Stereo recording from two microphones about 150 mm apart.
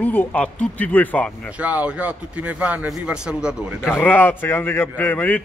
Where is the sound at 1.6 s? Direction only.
10° right (ahead or behind).